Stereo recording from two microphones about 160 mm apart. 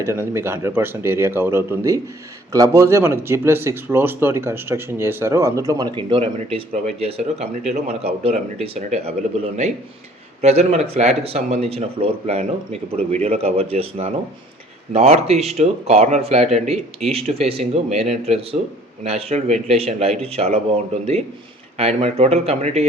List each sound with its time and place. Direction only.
0.0 s speech: 15° right (ahead or behind); by 9.1 s 40° right (ahead or behind)
10.4 s speech: 45° right (ahead or behind)